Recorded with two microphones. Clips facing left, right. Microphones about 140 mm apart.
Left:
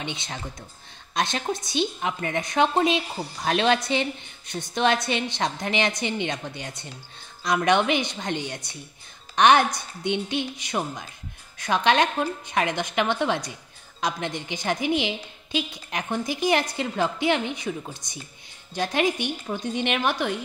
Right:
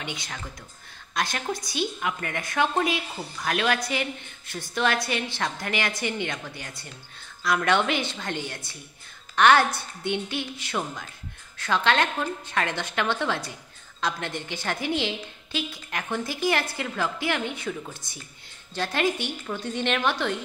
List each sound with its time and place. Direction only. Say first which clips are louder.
0.0 s a woman's voice: left 2 dB; 25° left (ahead or behind)